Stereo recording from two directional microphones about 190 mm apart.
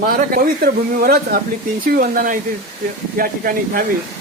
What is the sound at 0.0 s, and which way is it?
Speech, 50° right (ahead or behind).